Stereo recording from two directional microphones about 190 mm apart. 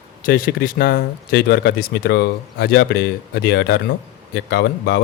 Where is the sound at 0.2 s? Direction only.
50° left (ahead or behind).